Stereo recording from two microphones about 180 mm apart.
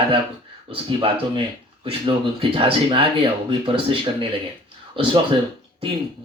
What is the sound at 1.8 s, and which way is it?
Speech, 30° right (ahead or behind).